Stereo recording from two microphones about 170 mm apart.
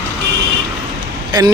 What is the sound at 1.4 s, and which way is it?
Speech, 25° right (ahead or behind).